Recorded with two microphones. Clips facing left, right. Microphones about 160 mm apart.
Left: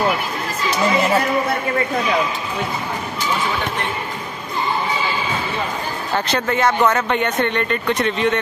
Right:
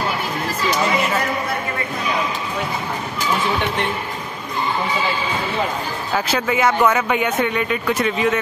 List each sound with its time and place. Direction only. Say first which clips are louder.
6.1 s speech: even; 5° right (ahead or behind)